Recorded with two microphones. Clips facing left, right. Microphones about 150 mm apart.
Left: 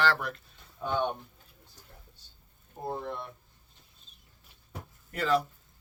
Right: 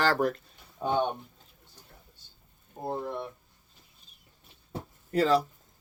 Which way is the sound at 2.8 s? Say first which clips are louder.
Right 2 dB; 10° right (ahead or behind).